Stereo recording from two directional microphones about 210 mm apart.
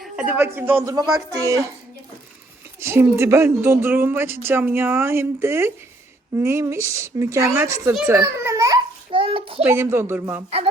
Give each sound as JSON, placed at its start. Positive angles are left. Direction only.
{"t": 0.0, "sound": "speech", "side_deg": -5}
{"t": 2.8, "sound": "speech", "side_deg": -10}
{"t": 7.9, "sound": "babbling", "side_deg": -10}
{"t": 9.6, "sound": "speech", "side_deg": -10}